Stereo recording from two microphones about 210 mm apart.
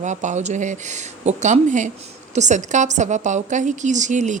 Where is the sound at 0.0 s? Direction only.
35° right (ahead or behind).